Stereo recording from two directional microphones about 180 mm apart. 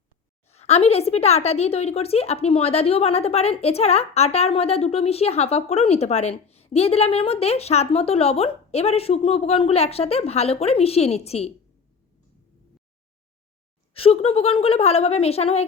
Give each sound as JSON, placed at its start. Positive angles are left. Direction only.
{"t": 0.4, "sound": "speech", "side_deg": 35}
{"t": 13.9, "sound": "speech", "side_deg": 35}